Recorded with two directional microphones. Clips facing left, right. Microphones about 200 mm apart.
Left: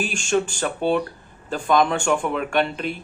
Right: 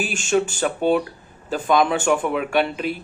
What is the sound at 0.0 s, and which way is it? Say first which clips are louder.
Speech: right 1 dB; 5° right (ahead or behind).